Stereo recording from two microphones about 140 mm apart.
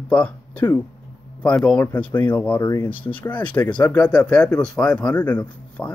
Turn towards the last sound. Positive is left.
turn(degrees=10)  # may be behind; listen again after turning